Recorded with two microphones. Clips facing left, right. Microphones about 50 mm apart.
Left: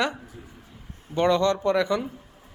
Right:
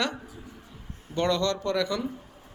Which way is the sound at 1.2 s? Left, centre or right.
Left.